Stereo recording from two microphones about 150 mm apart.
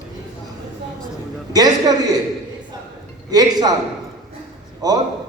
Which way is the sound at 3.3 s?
25° right (ahead or behind).